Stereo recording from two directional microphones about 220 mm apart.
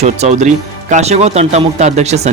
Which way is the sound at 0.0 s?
30° right (ahead or behind).